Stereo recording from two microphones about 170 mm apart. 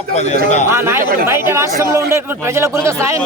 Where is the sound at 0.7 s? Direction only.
15° right (ahead or behind).